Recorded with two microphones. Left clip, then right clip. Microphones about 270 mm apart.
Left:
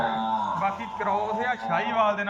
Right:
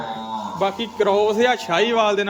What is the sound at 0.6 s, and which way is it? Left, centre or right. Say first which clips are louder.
A man's voice: right 7 dB; right.